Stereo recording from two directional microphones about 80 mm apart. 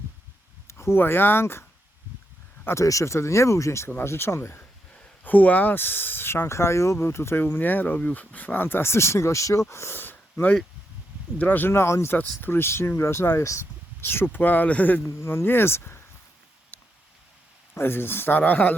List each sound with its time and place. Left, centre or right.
0.7 s speech: left
2.6 s speech: left
5.2 s speech: left
15.0 s speech: left
16.7 s a sound: left
17.7 s speech: left